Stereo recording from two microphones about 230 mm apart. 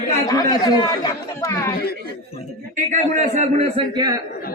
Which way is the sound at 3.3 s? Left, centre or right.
Right.